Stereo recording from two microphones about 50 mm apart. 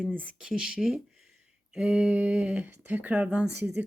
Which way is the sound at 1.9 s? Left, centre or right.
Right.